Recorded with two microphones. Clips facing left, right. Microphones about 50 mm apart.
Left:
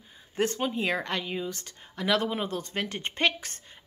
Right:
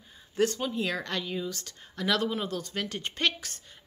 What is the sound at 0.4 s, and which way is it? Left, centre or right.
Speech, left.